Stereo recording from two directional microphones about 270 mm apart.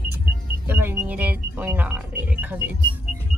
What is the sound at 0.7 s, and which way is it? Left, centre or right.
Speech, centre.